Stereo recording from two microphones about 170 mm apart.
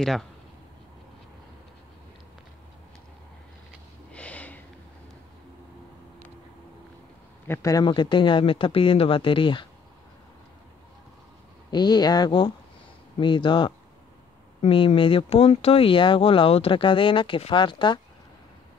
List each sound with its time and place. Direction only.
0.0 s speech: centre (ahead or behind)
4.1 s snort: 10° left (ahead or behind)
7.4 s speech: 15° left (ahead or behind)
11.7 s speech: 25° left (ahead or behind)